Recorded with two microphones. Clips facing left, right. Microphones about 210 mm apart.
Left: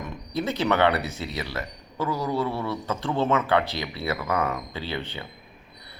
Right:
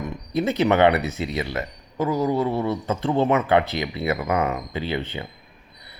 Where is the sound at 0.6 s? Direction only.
20° right (ahead or behind).